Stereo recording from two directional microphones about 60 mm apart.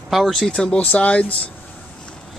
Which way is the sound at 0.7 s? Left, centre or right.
Left.